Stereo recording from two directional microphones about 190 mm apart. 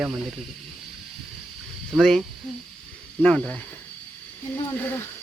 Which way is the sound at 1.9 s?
Centre (ahead or behind).